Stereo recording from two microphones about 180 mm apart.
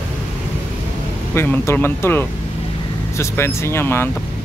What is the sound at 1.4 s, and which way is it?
Speech, 10° left (ahead or behind).